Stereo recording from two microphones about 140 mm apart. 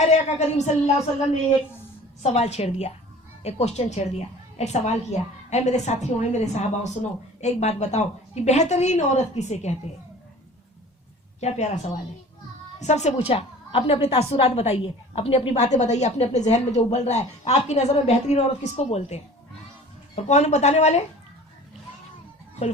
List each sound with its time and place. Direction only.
0.0 s speech: 55° left (ahead or behind)
2.2 s a woman's voice: 50° left (ahead or behind)
11.3 s a woman's voice: 55° left (ahead or behind)